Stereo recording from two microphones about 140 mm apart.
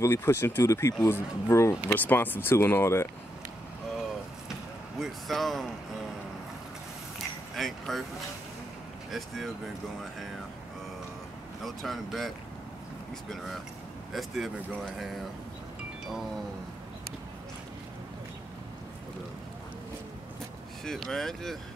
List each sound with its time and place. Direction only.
0.0 s speech: 20° left (ahead or behind)
4.5 s vehicle: centre (ahead or behind)
7.5 s speech: centre (ahead or behind)
9.1 s speech: centre (ahead or behind)
11.6 s speech: centre (ahead or behind)
14.1 s speech: centre (ahead or behind)
20.8 s speech: 5° left (ahead or behind)